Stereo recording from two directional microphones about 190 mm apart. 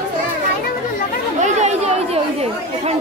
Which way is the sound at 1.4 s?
35° right (ahead or behind).